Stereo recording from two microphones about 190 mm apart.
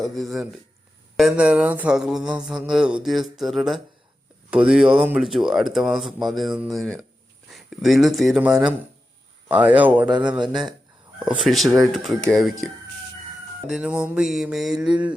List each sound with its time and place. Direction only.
0.0 s mantra: centre (ahead or behind)
7.5 s speech: centre (ahead or behind)
11.3 s mantra: centre (ahead or behind)
13.7 s mantra: 5° right (ahead or behind)
14.8 s mantra: 25° right (ahead or behind)